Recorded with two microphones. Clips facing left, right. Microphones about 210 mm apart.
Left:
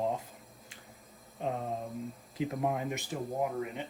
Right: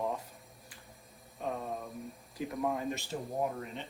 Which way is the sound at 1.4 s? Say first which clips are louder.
Left 2 dB; 20° left (ahead or behind).